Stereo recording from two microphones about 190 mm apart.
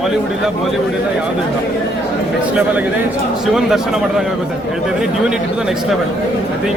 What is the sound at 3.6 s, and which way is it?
Speech, centre (ahead or behind).